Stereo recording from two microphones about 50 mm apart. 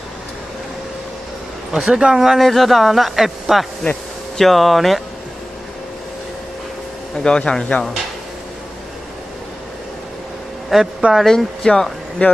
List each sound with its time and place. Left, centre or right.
1.7 s speech: centre
7.2 s speech: centre
10.7 s speech: centre
11.2 s speech: centre
12.2 s speech: left